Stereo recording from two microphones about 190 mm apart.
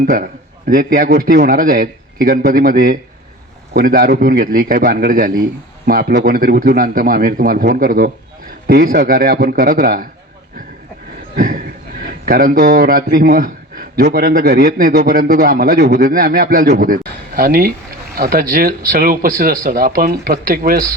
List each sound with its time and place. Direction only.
0.0 s a man's voice: 50° right (ahead or behind)
11.3 s a man's voice: 45° right (ahead or behind)